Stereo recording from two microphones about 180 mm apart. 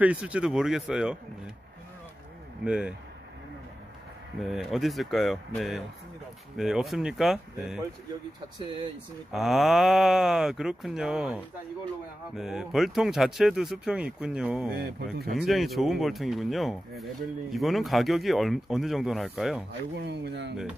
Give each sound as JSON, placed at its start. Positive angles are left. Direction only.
{"t": 0.0, "sound": "speech", "side_deg": -5}
{"t": 2.6, "sound": "speech", "side_deg": -5}
{"t": 4.4, "sound": "speech", "side_deg": 0}
{"t": 9.3, "sound": "speech", "side_deg": 0}
{"t": 20.0, "sound": "speech", "side_deg": -70}